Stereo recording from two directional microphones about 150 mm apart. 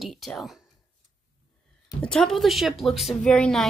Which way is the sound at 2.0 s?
5° left (ahead or behind).